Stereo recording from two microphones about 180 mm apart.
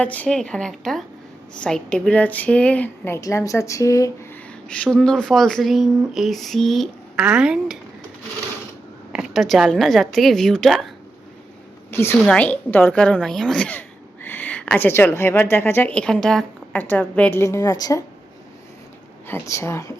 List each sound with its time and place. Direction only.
0.0 s a woman's voice: 10° left (ahead or behind)
4.7 s speech: 5° left (ahead or behind)
9.1 s speech: centre (ahead or behind)
11.9 s a sound: 15° left (ahead or behind)
12.2 s a woman's voice: 5° left (ahead or behind)
19.3 s a woman's voice: 15° left (ahead or behind)